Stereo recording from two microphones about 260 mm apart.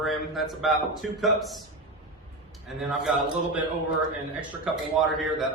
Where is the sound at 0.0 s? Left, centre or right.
Centre.